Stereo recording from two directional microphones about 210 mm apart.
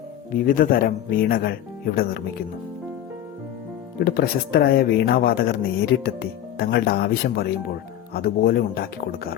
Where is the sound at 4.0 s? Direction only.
45° left (ahead or behind).